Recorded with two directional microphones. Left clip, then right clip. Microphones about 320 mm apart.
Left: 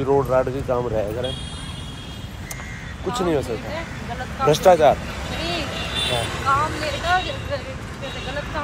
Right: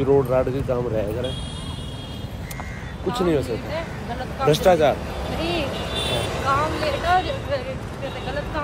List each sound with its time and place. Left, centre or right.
0.0 s speech: centre
3.1 s speech: centre
5.4 s vehicle: centre
5.8 s speech: right
7.1 s speech: centre